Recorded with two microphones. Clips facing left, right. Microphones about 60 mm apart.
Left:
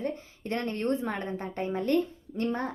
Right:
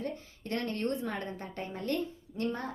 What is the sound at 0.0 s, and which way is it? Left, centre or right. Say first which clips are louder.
A woman's voice: left 5 dB; left.